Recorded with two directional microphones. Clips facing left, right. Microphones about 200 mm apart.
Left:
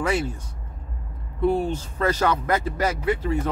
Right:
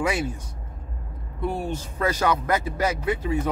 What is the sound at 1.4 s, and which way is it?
Speech, 10° right (ahead or behind).